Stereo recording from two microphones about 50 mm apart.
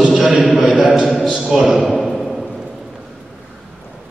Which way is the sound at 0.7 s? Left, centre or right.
Centre.